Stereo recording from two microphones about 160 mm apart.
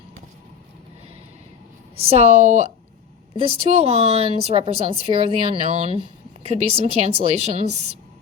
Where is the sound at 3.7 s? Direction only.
40° right (ahead or behind).